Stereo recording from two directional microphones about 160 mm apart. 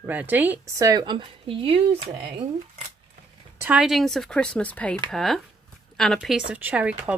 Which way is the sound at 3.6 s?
5° right (ahead or behind).